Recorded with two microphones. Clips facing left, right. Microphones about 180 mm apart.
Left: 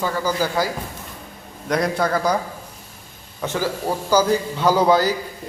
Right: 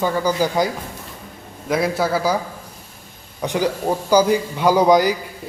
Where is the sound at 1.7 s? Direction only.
5° right (ahead or behind).